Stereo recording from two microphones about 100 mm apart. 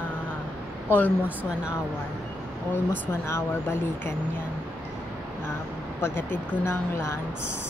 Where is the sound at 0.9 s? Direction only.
15° left (ahead or behind).